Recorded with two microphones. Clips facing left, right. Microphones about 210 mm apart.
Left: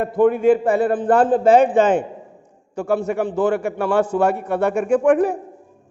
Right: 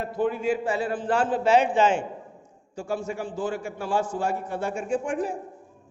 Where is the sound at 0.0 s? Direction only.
55° left (ahead or behind).